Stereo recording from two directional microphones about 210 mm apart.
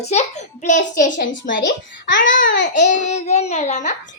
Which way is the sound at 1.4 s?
60° left (ahead or behind).